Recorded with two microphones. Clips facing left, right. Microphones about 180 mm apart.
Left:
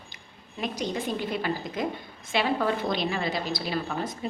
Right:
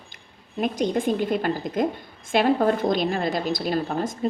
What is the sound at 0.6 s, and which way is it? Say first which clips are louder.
A woman's voice: right 7 dB; 50° right (ahead or behind).